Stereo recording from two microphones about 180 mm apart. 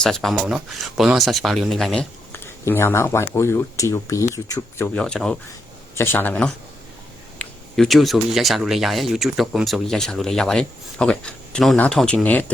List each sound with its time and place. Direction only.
0.0 s speech: centre (ahead or behind); by 4.9 s 15° left (ahead or behind)
4.9 s speech: 5° left (ahead or behind)